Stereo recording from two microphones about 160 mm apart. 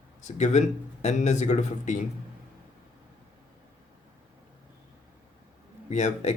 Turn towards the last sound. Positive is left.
turn(degrees=45)  # may be behind; listen again after turning